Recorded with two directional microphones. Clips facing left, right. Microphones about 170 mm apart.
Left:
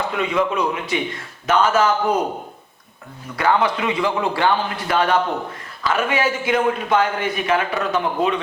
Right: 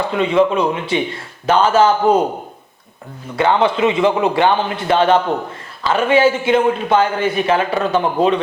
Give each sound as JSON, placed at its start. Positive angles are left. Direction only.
{"t": 0.0, "sound": "a man's voice", "side_deg": -30}
{"t": 3.3, "sound": "a man's voice", "side_deg": -25}